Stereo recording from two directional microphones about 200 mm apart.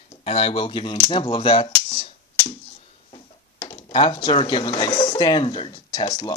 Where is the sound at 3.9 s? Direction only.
25° left (ahead or behind).